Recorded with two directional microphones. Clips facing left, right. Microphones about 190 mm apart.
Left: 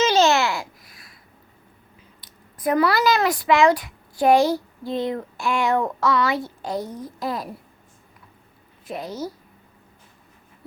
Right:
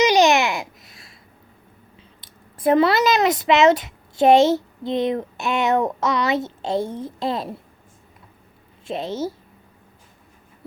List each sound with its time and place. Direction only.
0.0 s babbling: 15° right (ahead or behind)
2.2 s speech: 25° right (ahead or behind)
8.8 s speech: 25° right (ahead or behind)